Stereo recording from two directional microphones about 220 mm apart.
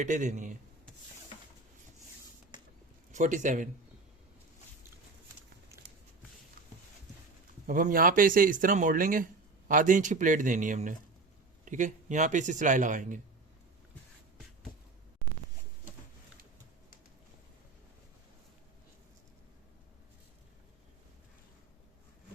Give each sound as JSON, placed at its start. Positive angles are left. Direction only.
{"t": 0.0, "sound": "speech", "side_deg": -35}
{"t": 3.1, "sound": "speech", "side_deg": -35}
{"t": 7.7, "sound": "speech", "side_deg": -40}